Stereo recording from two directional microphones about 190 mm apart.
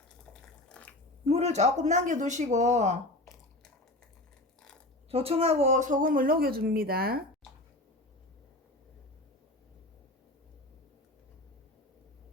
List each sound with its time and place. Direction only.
0.7 s a sound: 5° left (ahead or behind)
1.3 s speech: 35° right (ahead or behind)
5.1 s speech: 30° right (ahead or behind); by 7.2 s 55° right (ahead or behind)